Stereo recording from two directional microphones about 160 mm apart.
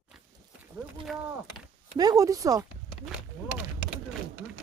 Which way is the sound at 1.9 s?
20° right (ahead or behind).